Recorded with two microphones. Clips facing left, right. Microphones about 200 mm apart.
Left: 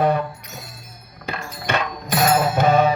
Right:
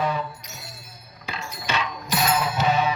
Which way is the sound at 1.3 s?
55° left (ahead or behind).